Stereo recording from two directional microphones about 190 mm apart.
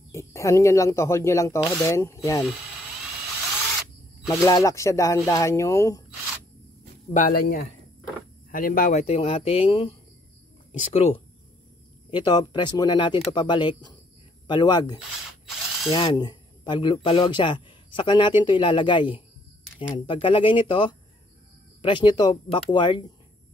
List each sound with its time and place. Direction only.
0.1 s speech: 15° left (ahead or behind)
4.3 s speech: 20° left (ahead or behind)
7.2 s speech: 50° left (ahead or behind)
9.0 s speech: 30° left (ahead or behind)